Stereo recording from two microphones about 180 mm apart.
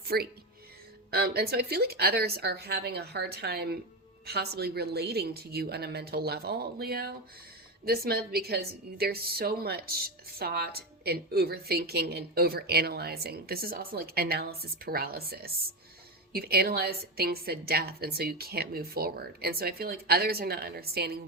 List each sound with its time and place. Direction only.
0.0 s a woman's voice: 60° right (ahead or behind)